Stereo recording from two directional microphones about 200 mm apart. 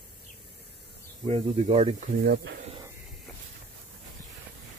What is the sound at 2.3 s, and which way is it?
Speech, 55° right (ahead or behind).